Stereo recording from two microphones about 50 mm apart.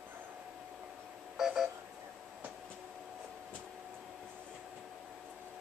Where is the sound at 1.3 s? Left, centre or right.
Centre.